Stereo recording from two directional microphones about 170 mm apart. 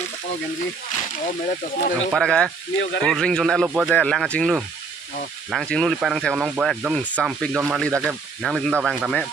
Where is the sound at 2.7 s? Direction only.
90° left.